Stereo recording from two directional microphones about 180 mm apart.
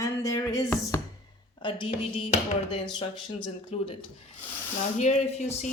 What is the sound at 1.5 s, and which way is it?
Speech, 25° left (ahead or behind).